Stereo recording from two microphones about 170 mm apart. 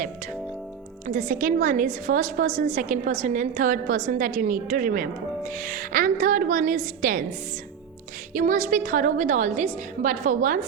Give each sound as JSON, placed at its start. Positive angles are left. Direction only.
{"t": 1.0, "sound": "a woman's voice", "side_deg": -50}
{"t": 8.3, "sound": "a woman's voice", "side_deg": -50}